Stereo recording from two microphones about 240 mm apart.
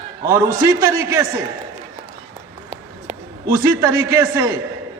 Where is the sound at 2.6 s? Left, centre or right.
Centre.